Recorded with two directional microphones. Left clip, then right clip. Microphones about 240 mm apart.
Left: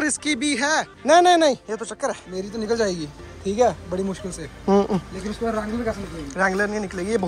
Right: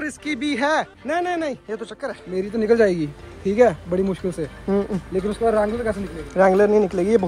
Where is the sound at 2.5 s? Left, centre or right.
Right.